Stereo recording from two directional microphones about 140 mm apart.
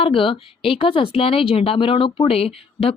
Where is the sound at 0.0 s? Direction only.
40° left (ahead or behind).